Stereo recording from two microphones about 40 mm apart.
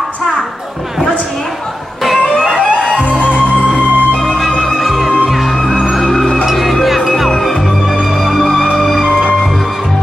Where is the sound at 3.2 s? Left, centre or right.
Left.